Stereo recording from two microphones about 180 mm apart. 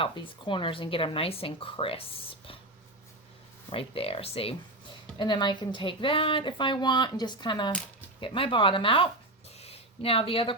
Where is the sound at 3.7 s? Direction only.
30° left (ahead or behind).